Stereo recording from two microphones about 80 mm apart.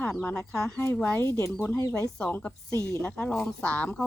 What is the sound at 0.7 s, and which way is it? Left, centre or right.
Speech, left.